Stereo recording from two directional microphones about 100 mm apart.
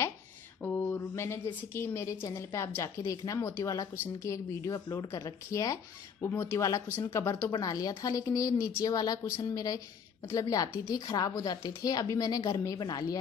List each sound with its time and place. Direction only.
0.6 s a woman's voice: 25° left (ahead or behind)
6.2 s a woman's voice: 25° left (ahead or behind)
7.5 s speech: 40° left (ahead or behind)